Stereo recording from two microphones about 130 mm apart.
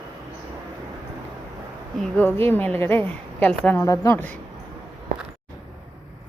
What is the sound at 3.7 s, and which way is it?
Speech, 20° left (ahead or behind).